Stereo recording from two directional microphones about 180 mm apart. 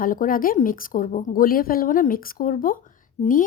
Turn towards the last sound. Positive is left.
turn(degrees=45)  # may be behind; listen again after turning